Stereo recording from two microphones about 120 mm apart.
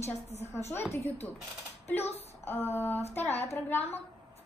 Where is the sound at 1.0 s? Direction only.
65° left (ahead or behind).